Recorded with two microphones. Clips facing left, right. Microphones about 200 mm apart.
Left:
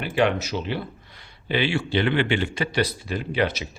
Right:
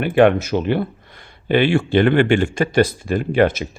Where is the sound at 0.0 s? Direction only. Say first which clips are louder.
Right 8 dB; 55° right (ahead or behind).